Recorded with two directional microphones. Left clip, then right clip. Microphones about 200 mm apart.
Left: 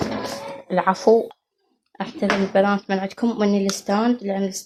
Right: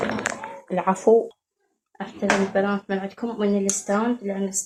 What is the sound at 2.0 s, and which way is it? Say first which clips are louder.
Speech: even; 40° left (ahead or behind).